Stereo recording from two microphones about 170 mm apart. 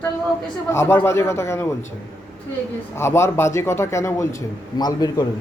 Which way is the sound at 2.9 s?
15° left (ahead or behind).